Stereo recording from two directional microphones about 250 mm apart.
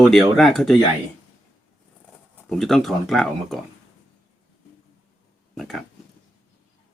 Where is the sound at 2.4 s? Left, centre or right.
Centre.